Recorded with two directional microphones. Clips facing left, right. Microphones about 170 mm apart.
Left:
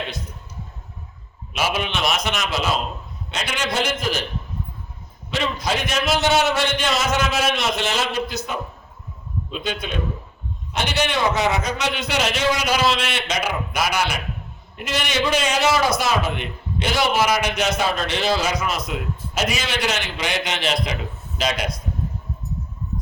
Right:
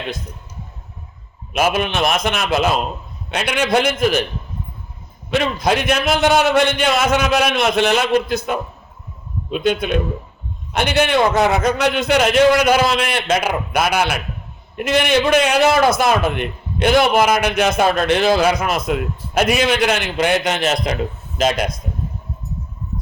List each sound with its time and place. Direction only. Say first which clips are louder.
1.5 s a man's voice: right 6 dB; 50° right (ahead or behind)
5.3 s a man's voice: right 6 dB; 55° right (ahead or behind)